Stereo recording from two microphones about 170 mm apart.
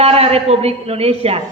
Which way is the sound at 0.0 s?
35° right (ahead or behind).